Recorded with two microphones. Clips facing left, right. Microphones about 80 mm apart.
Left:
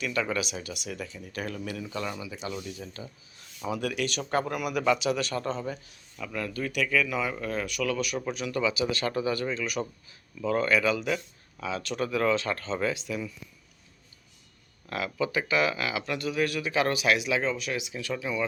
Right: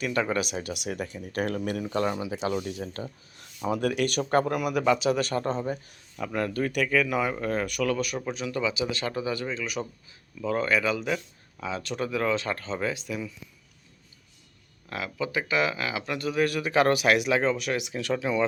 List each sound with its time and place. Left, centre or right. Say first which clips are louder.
0.0 s speech: right 3 dB; right
2.2 s speech: right 7 dB; right
2.5 s speech: right 6 dB; right
3.7 s a man's voice: right 4 dB; right; by 9.5 s centre
9.8 s speech: left 1 dB; centre
10.5 s speech: left 1 dB; centre
12.0 s speech: left 1 dB; centre
12.4 s speech: even; right
12.6 s speech: left 1 dB; centre
13.1 s speech: even; right
14.8 s speech: left 2 dB; right